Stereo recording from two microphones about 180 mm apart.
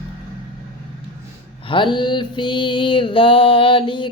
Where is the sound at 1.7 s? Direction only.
25° left (ahead or behind).